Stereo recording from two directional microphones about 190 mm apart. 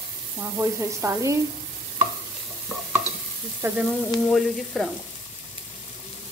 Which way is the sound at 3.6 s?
15° right (ahead or behind).